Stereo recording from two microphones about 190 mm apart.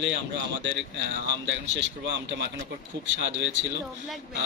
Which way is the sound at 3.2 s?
70° right (ahead or behind).